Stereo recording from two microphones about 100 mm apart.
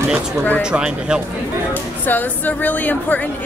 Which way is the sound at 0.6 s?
10° right (ahead or behind).